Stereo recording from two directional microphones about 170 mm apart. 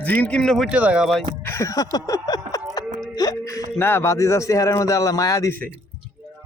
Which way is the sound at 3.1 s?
20° left (ahead or behind).